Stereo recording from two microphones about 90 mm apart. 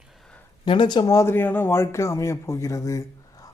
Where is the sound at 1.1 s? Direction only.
35° left (ahead or behind).